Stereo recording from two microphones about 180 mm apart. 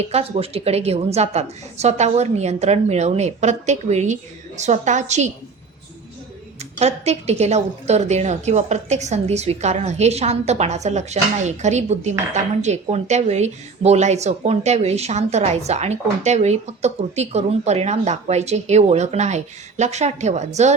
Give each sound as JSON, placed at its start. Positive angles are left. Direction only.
{"t": 0.0, "sound": "speech", "side_deg": -35}
{"t": 6.6, "sound": "speech", "side_deg": -35}